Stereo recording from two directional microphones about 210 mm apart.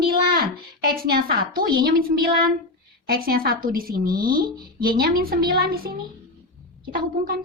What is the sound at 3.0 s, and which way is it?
Speech, 45° right (ahead or behind).